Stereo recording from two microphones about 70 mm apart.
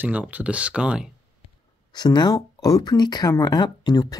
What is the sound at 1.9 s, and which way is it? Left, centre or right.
Speech, left.